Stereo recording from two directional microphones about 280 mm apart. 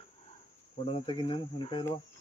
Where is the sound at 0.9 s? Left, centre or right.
Centre.